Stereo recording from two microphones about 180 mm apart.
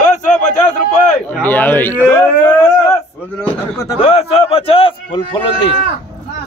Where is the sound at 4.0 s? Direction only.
30° left (ahead or behind).